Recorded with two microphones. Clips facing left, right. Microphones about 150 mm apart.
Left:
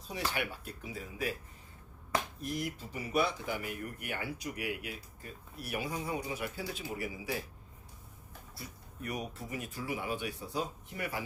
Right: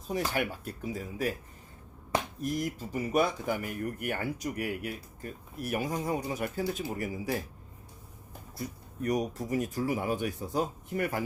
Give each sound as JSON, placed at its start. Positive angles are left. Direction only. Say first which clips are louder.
{"t": 0.1, "sound": "speech", "louder": "right 6 dB", "side_deg": -45}
{"t": 2.4, "sound": "speech", "louder": "right 5 dB", "side_deg": -45}
{"t": 8.5, "sound": "speech", "louder": "right 10 dB", "side_deg": -40}